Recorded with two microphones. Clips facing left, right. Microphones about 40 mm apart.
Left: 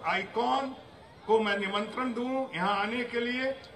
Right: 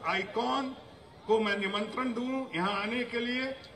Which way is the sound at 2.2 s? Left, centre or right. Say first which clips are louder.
Left 2 dB; centre.